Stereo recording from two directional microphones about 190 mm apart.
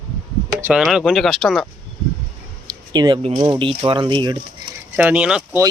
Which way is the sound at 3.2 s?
30° right (ahead or behind).